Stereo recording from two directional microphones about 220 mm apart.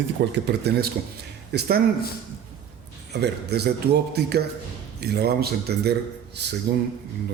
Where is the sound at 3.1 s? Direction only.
50° right (ahead or behind).